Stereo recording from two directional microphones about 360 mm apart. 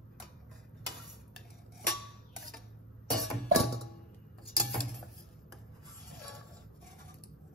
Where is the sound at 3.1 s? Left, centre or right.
Centre.